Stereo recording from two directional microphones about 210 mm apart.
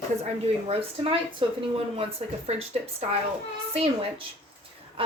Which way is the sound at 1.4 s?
25° right (ahead or behind).